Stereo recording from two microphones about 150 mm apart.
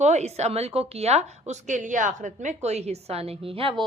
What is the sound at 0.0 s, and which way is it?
A woman's voice, 50° right (ahead or behind).